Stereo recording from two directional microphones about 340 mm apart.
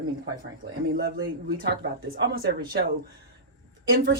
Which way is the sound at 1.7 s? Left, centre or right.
Right.